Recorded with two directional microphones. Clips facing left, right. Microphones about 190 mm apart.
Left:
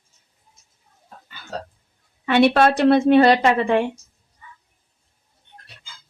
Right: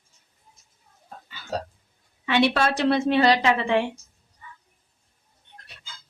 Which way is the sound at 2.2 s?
55° left (ahead or behind).